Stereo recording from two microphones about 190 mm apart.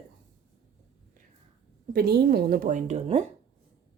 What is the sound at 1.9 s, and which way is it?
A woman's voice, 55° right (ahead or behind).